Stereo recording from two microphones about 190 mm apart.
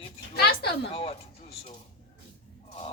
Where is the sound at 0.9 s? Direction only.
30° left (ahead or behind).